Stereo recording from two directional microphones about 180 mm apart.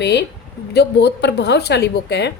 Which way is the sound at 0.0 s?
70° left (ahead or behind).